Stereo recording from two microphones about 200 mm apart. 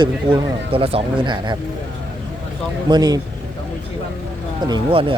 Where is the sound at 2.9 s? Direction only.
20° right (ahead or behind).